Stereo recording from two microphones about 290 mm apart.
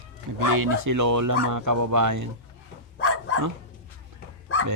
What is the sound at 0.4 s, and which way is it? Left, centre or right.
Speech, right.